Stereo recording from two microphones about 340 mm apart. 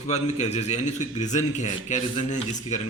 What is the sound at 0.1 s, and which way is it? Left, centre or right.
A man's voice, centre.